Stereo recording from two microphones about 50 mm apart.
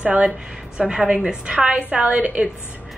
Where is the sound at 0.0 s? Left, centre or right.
Right.